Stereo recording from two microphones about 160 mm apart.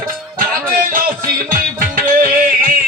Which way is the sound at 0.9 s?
65° right (ahead or behind).